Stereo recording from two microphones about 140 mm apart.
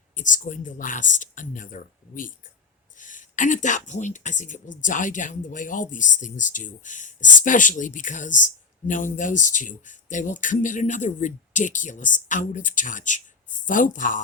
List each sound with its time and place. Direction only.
0.2 s speech: 65° left (ahead or behind)